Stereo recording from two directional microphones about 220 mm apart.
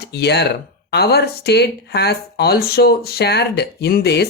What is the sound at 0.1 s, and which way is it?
Speech, 50° left (ahead or behind).